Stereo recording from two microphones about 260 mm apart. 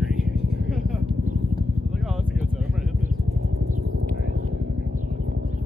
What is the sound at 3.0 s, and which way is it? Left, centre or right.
Vehicle, right.